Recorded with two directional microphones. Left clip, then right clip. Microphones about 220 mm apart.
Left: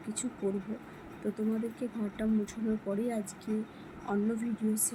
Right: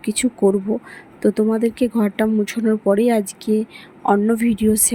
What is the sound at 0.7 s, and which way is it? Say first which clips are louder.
Speech: right 18 dB; 40° right (ahead or behind).